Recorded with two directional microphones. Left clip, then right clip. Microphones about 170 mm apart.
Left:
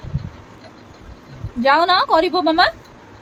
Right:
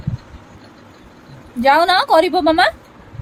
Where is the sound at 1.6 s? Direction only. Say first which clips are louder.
Right 2 dB; 25° right (ahead or behind).